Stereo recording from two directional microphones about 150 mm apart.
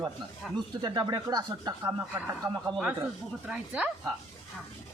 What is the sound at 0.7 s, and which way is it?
Speech, 30° right (ahead or behind).